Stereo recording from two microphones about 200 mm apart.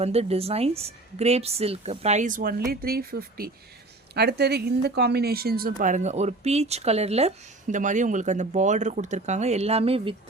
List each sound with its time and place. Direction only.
0.0 s speech: 30° right (ahead or behind)